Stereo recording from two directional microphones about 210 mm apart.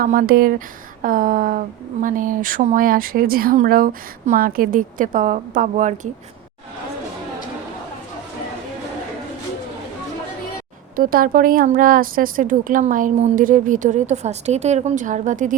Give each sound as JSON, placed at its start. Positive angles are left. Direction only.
{"t": 0.0, "sound": "speech", "side_deg": -40}
{"t": 10.9, "sound": "speech", "side_deg": -45}